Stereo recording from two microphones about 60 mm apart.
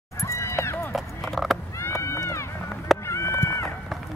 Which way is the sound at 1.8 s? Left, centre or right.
Left.